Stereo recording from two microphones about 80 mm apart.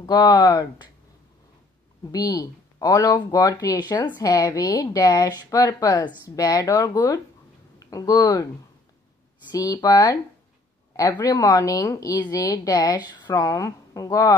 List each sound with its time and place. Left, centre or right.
0.0 s speech: left
2.0 s speech: left
4.2 s speech: left
6.3 s speech: left
7.8 s a sound: left
8.1 s speech: left
9.5 s speech: left
11.0 s speech: left
13.4 s speech: left